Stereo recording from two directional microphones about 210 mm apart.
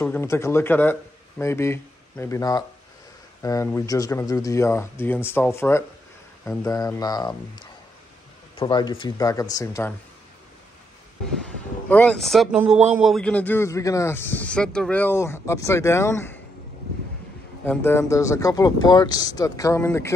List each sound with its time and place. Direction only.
0.0 s speech: 10° left (ahead or behind)
11.4 s speech: 5° left (ahead or behind)
17.6 s speech: 10° left (ahead or behind)